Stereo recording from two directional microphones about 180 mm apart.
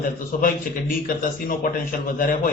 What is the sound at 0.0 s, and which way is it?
A man's voice, 50° left (ahead or behind).